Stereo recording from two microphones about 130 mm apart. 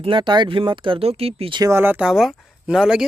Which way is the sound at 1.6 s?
20° right (ahead or behind).